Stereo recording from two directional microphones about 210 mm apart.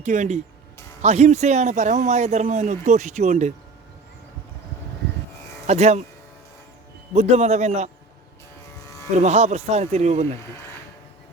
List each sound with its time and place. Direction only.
0.0 s speech: 35° right (ahead or behind)
5.6 s speech: 30° right (ahead or behind)
7.1 s speech: 30° right (ahead or behind)
9.1 s speech: 30° right (ahead or behind)